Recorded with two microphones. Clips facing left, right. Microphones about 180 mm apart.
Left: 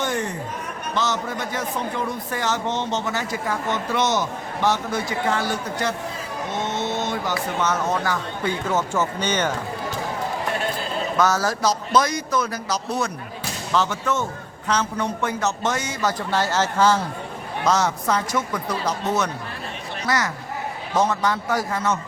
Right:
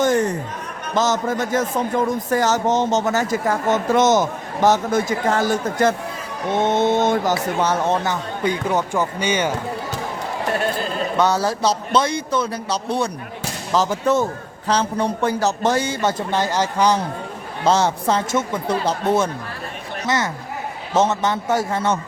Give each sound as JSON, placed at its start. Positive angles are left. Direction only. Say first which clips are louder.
{"t": 0.0, "sound": "a sound", "louder": "right 8 dB", "side_deg": -40}
{"t": 0.9, "sound": "speech", "louder": "right 6 dB", "side_deg": -45}
{"t": 7.6, "sound": "speech", "louder": "right 2 dB", "side_deg": -30}
{"t": 11.2, "sound": "a man's voice", "louder": "right 2 dB", "side_deg": -30}
{"t": 17.6, "sound": "speech", "louder": "right 3 dB", "side_deg": -30}